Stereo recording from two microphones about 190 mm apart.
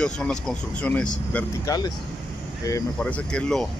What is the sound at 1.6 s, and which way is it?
Speech, 20° left (ahead or behind).